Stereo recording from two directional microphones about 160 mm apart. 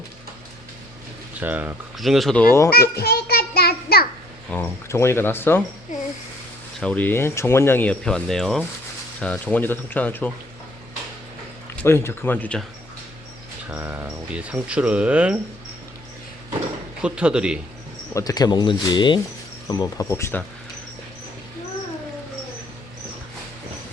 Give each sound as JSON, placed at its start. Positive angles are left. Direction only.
{"t": 1.4, "sound": "speech", "side_deg": -10}
{"t": 2.0, "sound": "speech", "side_deg": 0}
{"t": 2.9, "sound": "a sound", "side_deg": 75}
{"t": 4.4, "sound": "speech", "side_deg": 15}
{"t": 6.7, "sound": "speech", "side_deg": 10}
{"t": 11.8, "sound": "speech", "side_deg": 15}
{"t": 13.7, "sound": "speech", "side_deg": -10}
{"t": 17.0, "sound": "speech", "side_deg": -5}
{"t": 18.1, "sound": "speech", "side_deg": 20}